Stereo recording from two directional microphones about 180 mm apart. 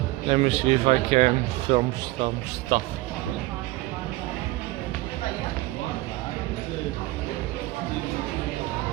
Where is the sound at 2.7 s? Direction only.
50° right (ahead or behind).